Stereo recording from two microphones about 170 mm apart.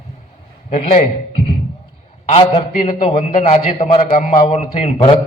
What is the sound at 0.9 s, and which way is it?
A man's voice, 40° left (ahead or behind).